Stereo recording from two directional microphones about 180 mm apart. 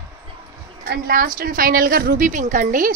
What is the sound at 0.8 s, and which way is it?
A woman's voice, 60° right (ahead or behind).